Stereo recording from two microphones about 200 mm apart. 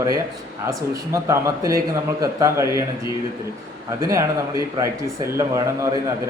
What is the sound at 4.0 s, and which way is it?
Speech, 15° right (ahead or behind).